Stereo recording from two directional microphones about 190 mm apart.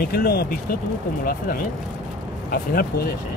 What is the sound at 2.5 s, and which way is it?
Speech, 55° left (ahead or behind).